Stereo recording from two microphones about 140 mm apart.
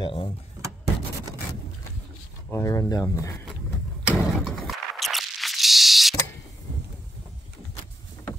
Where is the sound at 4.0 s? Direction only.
Centre (ahead or behind).